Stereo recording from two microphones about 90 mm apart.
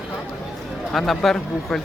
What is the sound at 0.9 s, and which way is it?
Speech, centre (ahead or behind).